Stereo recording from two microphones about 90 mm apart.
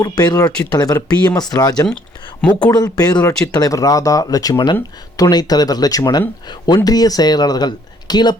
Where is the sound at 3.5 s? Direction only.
40° left (ahead or behind).